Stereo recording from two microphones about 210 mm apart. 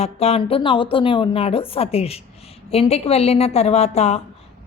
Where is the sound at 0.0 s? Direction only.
30° left (ahead or behind).